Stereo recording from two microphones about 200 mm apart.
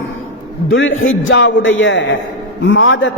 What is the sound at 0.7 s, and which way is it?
A man's voice, 70° left (ahead or behind).